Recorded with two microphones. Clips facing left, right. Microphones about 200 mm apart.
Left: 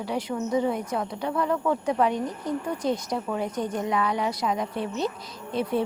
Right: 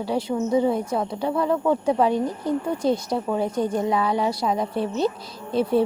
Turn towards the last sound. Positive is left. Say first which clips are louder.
# right 6 dB
turn(degrees=-30)  # may be behind; listen again after turning